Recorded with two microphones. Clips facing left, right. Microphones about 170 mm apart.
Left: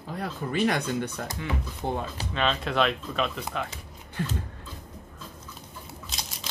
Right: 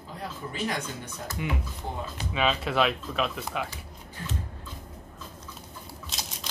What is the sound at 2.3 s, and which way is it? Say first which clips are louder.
Speech: right 1 dB; 5° right (ahead or behind).